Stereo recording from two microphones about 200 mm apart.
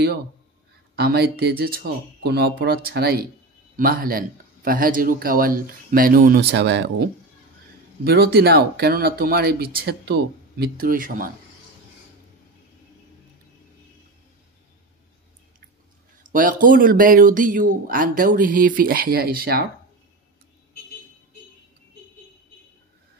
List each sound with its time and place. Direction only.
0.9 s speech: 50° right (ahead or behind)
16.2 s speech: 40° right (ahead or behind)